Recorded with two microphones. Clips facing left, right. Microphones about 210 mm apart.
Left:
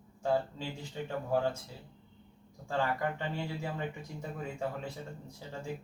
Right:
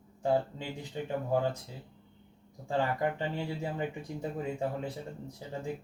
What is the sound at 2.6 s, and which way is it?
Speech, 20° right (ahead or behind).